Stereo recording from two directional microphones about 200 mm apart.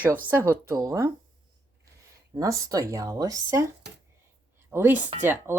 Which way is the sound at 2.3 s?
15° right (ahead or behind).